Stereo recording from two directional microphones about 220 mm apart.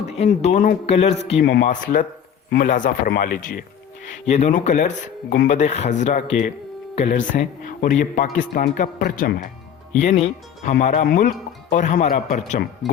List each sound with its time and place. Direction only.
0.0 s a man's voice: 30° left (ahead or behind)